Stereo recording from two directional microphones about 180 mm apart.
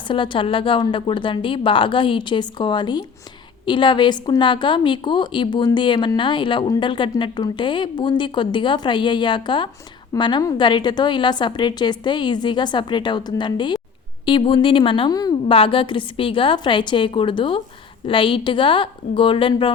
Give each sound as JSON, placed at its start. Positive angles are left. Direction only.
{"t": 0.1, "sound": "a woman's voice", "side_deg": 25}